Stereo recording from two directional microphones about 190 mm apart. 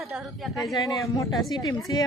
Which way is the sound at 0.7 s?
20° left (ahead or behind).